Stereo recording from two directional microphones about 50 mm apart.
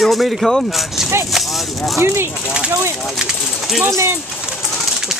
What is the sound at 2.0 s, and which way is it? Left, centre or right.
Speech, right.